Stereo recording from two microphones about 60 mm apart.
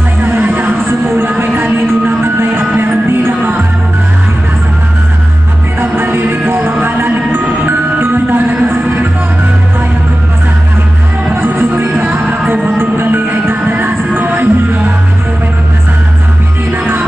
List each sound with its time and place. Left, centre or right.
0.2 s music: right
5.8 s music: right
11.7 s music: right
12.0 s music: right